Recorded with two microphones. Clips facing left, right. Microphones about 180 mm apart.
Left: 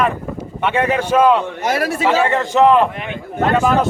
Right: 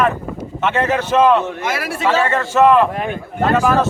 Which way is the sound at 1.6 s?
40° left (ahead or behind).